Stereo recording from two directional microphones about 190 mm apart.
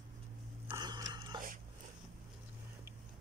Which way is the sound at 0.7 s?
20° right (ahead or behind).